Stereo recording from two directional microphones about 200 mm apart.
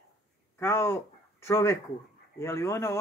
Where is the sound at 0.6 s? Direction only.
15° left (ahead or behind).